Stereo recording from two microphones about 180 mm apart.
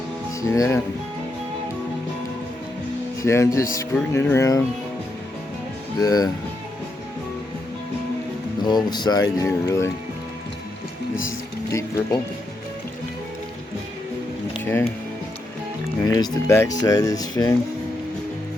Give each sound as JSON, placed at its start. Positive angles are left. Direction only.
{"t": 0.4, "sound": "speech", "side_deg": 20}
{"t": 3.2, "sound": "speech", "side_deg": 15}
{"t": 6.0, "sound": "speech", "side_deg": 20}
{"t": 8.6, "sound": "speech", "side_deg": 25}
{"t": 11.3, "sound": "speech", "side_deg": 15}
{"t": 14.6, "sound": "music", "side_deg": 15}
{"t": 16.0, "sound": "speech", "side_deg": 20}